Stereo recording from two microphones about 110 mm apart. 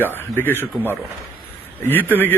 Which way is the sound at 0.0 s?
20° left (ahead or behind).